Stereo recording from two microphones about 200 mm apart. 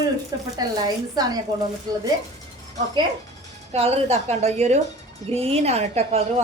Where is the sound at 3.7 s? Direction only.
30° right (ahead or behind).